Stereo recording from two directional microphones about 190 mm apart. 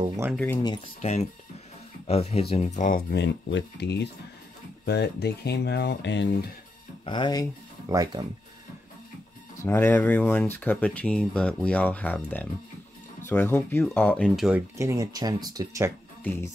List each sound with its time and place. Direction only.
0.3 s speech: 5° left (ahead or behind)
2.0 s speech: 35° left (ahead or behind)
3.1 s speech: 65° left (ahead or behind)
7.1 s speech: 25° left (ahead or behind)
7.9 s speech: 20° right (ahead or behind)
9.6 s speech: 10° left (ahead or behind)
14.8 s speech: 15° right (ahead or behind)